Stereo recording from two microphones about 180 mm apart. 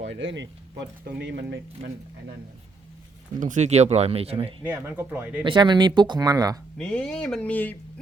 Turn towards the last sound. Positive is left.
turn(degrees=10)  # may be behind; listen again after turning